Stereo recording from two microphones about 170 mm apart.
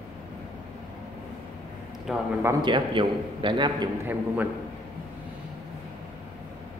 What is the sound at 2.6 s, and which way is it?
A man's voice, 30° right (ahead or behind).